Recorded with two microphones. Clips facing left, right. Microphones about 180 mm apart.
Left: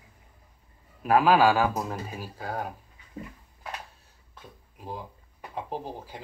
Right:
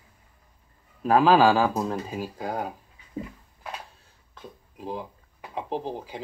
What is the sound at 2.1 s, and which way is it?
Speech, 15° right (ahead or behind).